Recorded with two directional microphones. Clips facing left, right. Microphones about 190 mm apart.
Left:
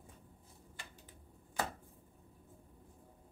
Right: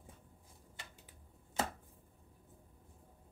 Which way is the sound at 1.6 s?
25° right (ahead or behind).